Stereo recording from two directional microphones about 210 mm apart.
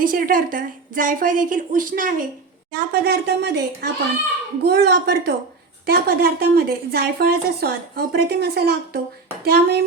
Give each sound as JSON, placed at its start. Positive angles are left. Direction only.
{"t": 0.0, "sound": "a woman's voice", "side_deg": -40}